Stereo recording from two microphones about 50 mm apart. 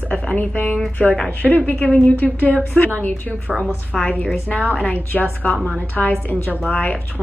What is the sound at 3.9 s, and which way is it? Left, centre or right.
A woman's voice, left.